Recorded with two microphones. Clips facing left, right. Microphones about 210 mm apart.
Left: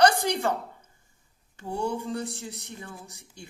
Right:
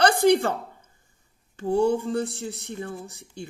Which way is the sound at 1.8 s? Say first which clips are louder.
Right 7 dB; 50° right (ahead or behind).